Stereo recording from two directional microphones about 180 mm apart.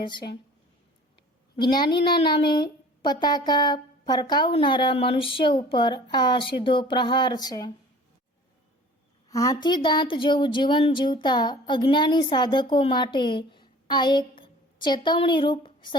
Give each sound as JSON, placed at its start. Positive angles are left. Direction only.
{"t": 0.0, "sound": "a woman's voice", "side_deg": 25}
{"t": 1.5, "sound": "a woman's voice", "side_deg": 25}
{"t": 9.3, "sound": "a woman's voice", "side_deg": 20}